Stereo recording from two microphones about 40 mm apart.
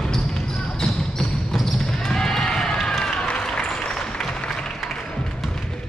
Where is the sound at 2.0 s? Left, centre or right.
Centre.